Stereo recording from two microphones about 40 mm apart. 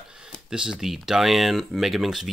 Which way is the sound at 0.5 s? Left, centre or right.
Centre.